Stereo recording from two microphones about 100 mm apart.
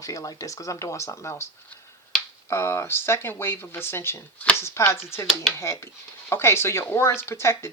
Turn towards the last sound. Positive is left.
turn(degrees=25)  # may be behind; listen again after turning